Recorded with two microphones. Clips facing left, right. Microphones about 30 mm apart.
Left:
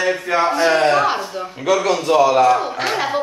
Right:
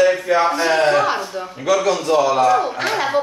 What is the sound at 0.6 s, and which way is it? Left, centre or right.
Speech, left.